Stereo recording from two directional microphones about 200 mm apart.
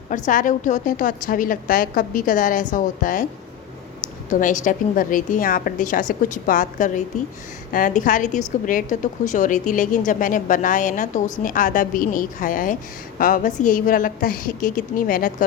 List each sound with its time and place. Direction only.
0.1 s a woman's voice: 40° left (ahead or behind)
4.3 s a woman's voice: 40° left (ahead or behind)